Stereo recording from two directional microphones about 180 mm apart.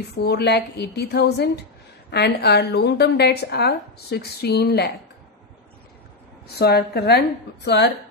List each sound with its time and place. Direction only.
0.1 s a woman's voice: 65° left (ahead or behind)
6.4 s a woman's voice: 60° left (ahead or behind)